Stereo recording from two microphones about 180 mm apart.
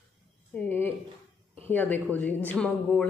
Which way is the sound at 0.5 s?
10° left (ahead or behind).